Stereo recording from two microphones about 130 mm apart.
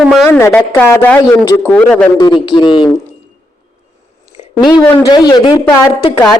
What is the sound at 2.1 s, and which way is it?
Speech, 35° left (ahead or behind).